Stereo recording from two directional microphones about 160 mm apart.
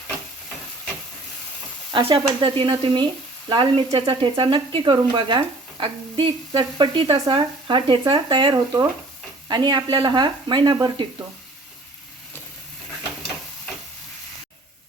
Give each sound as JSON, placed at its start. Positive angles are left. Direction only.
{"t": 1.9, "sound": "stir", "side_deg": -35}
{"t": 2.4, "sound": "speech", "side_deg": -30}